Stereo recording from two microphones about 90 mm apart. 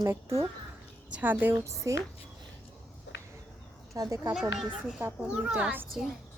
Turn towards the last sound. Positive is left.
turn(degrees=0)  # may be behind; listen again after turning